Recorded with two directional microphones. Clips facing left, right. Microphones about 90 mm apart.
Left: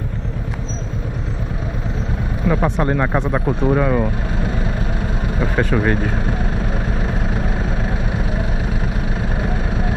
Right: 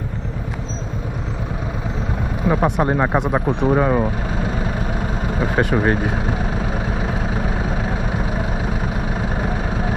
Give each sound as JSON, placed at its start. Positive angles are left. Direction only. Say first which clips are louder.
{"t": 2.4, "sound": "speech", "louder": "right 1 dB", "side_deg": -20}
{"t": 5.4, "sound": "speech", "louder": "even", "side_deg": -20}